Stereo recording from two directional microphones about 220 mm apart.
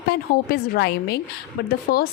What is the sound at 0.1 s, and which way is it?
A woman's voice, 45° left (ahead or behind).